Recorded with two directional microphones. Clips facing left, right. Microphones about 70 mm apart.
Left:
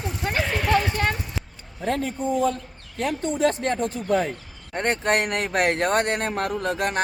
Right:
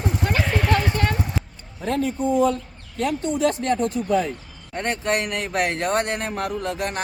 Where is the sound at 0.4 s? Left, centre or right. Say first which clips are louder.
Left 2 dB; centre.